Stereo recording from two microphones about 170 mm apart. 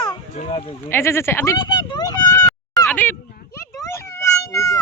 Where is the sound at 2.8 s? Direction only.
10° left (ahead or behind).